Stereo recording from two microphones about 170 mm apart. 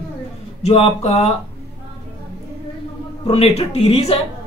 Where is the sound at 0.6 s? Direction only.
40° left (ahead or behind).